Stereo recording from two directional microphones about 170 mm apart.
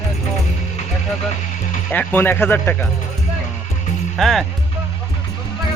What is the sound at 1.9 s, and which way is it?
Speech, 10° left (ahead or behind).